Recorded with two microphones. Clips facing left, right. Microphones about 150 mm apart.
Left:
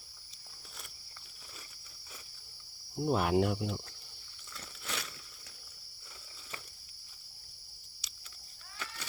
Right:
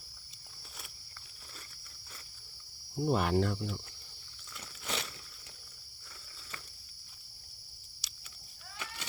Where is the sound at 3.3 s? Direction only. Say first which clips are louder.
Left 2 dB; 15° left (ahead or behind).